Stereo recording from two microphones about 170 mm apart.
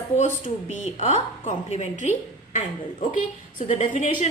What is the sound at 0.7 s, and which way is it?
A woman's voice, 45° left (ahead or behind).